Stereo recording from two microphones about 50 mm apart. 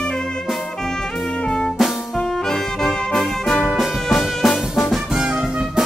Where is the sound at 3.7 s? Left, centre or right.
Centre.